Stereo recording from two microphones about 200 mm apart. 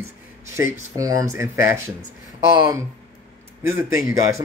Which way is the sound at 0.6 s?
15° right (ahead or behind).